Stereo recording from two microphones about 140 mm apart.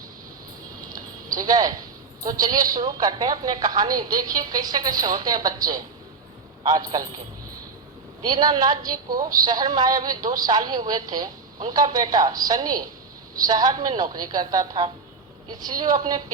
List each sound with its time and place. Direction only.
0.9 s a sound: 25° right (ahead or behind)
2.2 s a woman's voice: 25° right (ahead or behind)
8.2 s a woman's voice: 30° right (ahead or behind)